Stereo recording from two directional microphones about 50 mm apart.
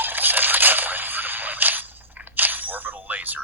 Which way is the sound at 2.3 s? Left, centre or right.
Right.